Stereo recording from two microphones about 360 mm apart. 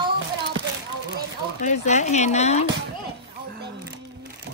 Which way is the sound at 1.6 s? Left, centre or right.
Centre.